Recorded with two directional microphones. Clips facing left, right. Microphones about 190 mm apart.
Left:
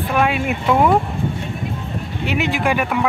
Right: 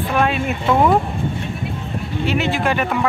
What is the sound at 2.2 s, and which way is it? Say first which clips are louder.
Speech: even; 15° left (ahead or behind).